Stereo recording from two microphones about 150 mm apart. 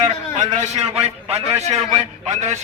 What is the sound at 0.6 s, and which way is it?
A man's voice, 45° right (ahead or behind).